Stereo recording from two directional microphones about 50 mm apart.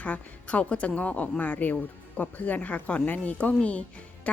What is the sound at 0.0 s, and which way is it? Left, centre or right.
A woman's voice, left.